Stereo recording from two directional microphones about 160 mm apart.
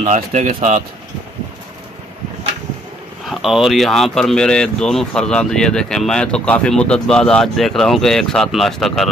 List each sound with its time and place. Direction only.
0.0 s speech: 45° right (ahead or behind)
3.3 s speech: centre (ahead or behind)